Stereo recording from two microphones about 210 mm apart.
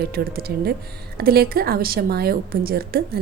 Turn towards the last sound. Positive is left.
turn(degrees=-45)  # may be behind; listen again after turning